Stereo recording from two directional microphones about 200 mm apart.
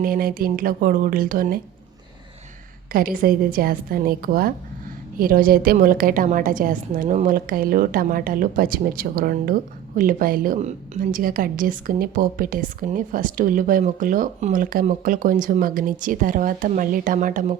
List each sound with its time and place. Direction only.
0.0 s a woman's voice: 45° right (ahead or behind)
2.9 s a woman's voice: 45° right (ahead or behind)